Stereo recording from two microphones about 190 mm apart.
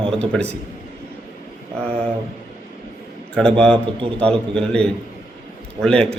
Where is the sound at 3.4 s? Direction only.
5° left (ahead or behind).